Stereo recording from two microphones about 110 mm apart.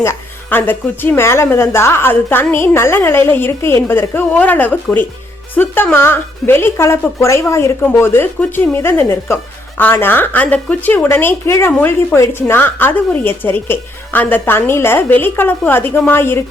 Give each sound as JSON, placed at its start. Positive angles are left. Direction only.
{"t": 0.0, "sound": "speech", "side_deg": 20}